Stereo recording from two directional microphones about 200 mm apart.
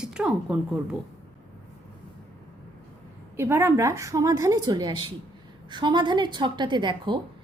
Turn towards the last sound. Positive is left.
turn(degrees=-25)  # may be behind; listen again after turning